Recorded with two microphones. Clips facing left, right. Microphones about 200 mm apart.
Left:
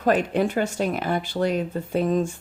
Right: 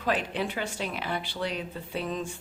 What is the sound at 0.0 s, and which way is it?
A woman's voice, 45° left (ahead or behind).